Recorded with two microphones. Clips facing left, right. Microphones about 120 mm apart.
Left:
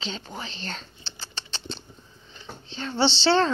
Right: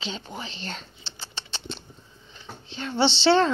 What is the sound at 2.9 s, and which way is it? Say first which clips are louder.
Speech: right 2 dB; 15° right (ahead or behind).